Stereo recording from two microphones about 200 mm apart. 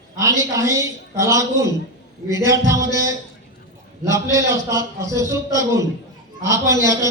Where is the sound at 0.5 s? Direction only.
15° right (ahead or behind).